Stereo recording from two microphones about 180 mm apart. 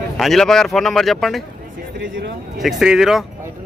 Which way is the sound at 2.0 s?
90° right.